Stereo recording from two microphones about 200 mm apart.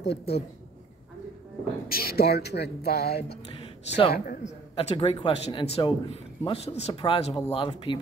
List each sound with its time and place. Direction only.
0.0 s a woman's voice: 55° left (ahead or behind)
1.9 s speech: 50° left (ahead or behind)
3.6 s a sound: 30° left (ahead or behind)
4.1 s speech: 45° left (ahead or behind)
4.7 s a man's voice: 30° left (ahead or behind)